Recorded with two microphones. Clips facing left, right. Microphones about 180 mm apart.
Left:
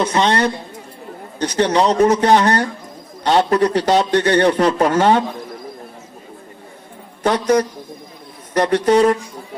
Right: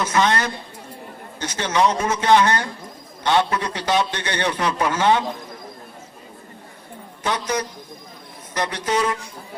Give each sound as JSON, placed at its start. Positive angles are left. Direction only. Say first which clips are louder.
{"t": 0.0, "sound": "a man's voice", "louder": "left 4 dB", "side_deg": 30}
{"t": 7.2, "sound": "a man's voice", "louder": "left 9 dB", "side_deg": 45}